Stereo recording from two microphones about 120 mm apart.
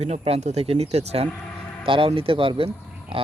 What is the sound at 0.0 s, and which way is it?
Speech, 60° right (ahead or behind).